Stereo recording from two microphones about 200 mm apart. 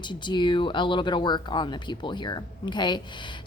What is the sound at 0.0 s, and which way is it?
Speech, 20° left (ahead or behind).